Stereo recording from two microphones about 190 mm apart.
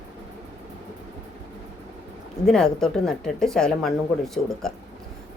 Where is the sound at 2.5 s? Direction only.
5° left (ahead or behind).